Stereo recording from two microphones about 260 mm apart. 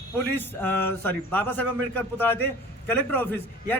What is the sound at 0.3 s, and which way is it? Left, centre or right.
A man's voice, centre.